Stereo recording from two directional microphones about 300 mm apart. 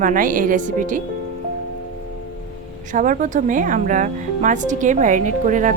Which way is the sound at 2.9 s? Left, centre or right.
Right.